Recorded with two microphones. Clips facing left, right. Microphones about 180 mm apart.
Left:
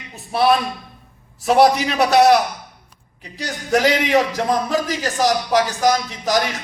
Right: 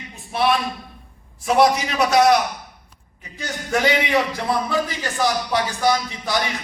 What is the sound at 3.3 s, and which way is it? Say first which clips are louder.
A man's voice: left 4 dB; 35° left (ahead or behind).